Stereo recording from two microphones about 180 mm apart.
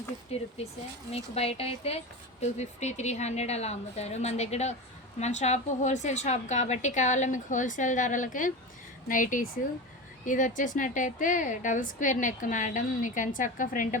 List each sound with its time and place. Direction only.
0.3 s a woman's voice: 35° left (ahead or behind)